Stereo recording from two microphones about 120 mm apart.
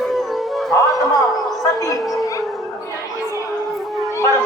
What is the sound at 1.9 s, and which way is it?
Speech, centre (ahead or behind).